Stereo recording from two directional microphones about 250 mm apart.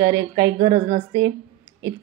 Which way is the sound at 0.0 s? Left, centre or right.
Centre.